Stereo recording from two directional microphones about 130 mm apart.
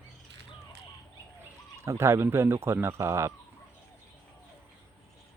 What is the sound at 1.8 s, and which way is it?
Speech, 20° right (ahead or behind).